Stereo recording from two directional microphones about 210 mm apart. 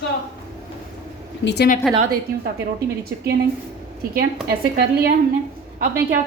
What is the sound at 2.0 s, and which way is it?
Speech, 45° right (ahead or behind).